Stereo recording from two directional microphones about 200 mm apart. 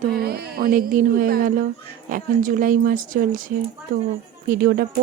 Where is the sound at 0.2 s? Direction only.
50° right (ahead or behind).